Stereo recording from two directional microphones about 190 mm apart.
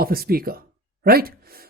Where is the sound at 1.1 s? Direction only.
55° right (ahead or behind).